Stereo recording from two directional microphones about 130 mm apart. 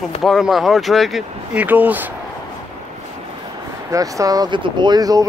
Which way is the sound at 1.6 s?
10° right (ahead or behind).